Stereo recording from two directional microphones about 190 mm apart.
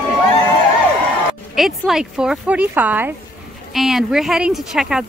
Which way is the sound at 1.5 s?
Centre (ahead or behind).